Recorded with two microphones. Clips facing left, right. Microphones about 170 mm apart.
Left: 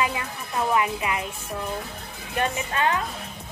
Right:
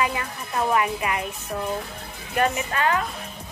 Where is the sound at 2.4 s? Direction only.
20° left (ahead or behind).